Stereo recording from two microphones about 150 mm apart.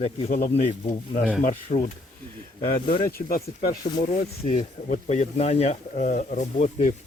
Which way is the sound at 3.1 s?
75° left (ahead or behind).